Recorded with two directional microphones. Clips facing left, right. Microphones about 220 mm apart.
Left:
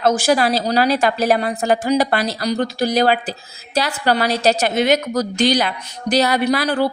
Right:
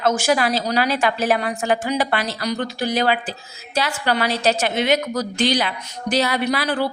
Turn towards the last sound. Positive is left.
turn(degrees=40)  # may be behind; listen again after turning